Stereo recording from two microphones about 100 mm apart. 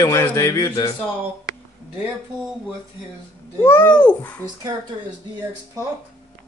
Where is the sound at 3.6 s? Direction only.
20° left (ahead or behind).